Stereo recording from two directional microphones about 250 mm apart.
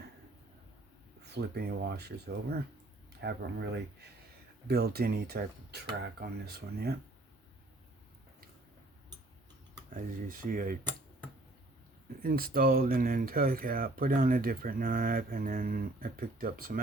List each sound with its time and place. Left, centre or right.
1.3 s speech: right
9.9 s speech: right
12.2 s speech: right